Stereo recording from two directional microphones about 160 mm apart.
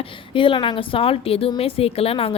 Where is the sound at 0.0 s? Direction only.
30° left (ahead or behind).